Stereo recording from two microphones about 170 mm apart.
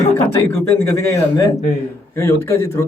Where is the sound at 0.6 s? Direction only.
15° left (ahead or behind).